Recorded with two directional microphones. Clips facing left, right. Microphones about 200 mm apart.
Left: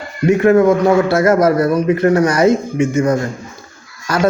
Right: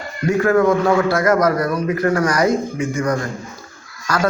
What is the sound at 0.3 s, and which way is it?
A man's voice, 20° left (ahead or behind).